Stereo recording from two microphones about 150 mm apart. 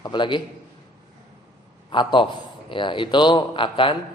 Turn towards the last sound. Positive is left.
turn(degrees=35)  # may be behind; listen again after turning